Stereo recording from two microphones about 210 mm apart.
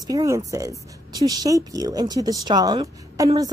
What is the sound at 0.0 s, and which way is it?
A woman's voice, 15° right (ahead or behind).